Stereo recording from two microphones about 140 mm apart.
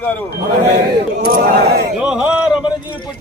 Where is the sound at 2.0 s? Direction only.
5° right (ahead or behind).